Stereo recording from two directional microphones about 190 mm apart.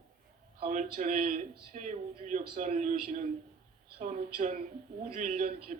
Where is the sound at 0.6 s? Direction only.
45° right (ahead or behind).